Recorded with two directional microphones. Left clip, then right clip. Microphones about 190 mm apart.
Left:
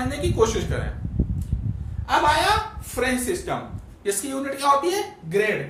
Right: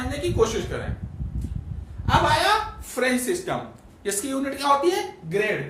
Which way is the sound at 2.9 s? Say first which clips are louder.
Right 1 dB; 10° right (ahead or behind).